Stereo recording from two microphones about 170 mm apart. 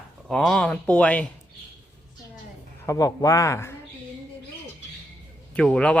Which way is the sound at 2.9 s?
20° left (ahead or behind).